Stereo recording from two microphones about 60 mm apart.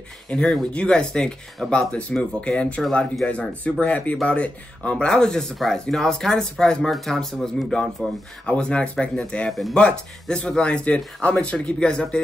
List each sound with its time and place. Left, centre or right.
0.3 s speech: centre
8.5 s speech: centre
9.5 s speech: centre
9.8 s speech: centre